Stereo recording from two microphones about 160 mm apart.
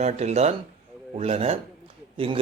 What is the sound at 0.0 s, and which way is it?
Speech, 45° right (ahead or behind).